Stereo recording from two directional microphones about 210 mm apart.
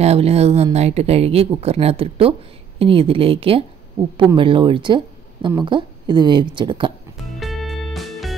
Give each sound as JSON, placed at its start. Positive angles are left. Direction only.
{"t": 0.0, "sound": "speech", "side_deg": -30}
{"t": 7.3, "sound": "music", "side_deg": 0}